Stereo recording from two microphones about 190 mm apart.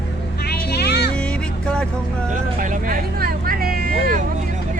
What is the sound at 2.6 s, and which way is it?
Vehicle, 50° right (ahead or behind).